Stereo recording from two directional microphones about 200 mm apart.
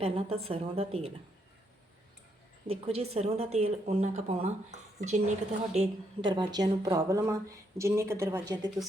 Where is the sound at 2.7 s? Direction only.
30° right (ahead or behind).